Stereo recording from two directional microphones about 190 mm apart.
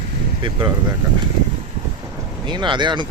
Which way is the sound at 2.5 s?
25° right (ahead or behind).